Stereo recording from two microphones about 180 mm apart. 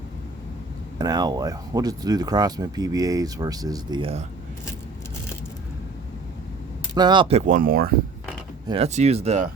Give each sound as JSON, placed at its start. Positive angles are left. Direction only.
{"t": 0.9, "sound": "speech", "side_deg": -20}
{"t": 6.9, "sound": "speech", "side_deg": -25}
{"t": 8.6, "sound": "speech", "side_deg": -30}